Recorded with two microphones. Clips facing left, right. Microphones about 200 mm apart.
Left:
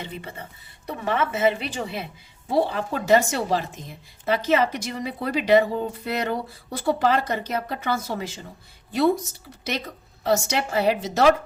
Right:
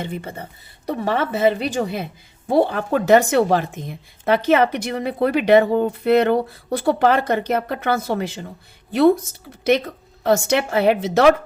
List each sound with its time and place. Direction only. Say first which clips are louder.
0.0 s a woman's voice: right 6 dB; 45° right (ahead or behind)
10.2 s speech: right 5 dB; 55° right (ahead or behind)